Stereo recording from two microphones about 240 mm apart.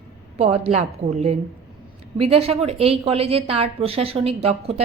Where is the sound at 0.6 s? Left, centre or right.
Right.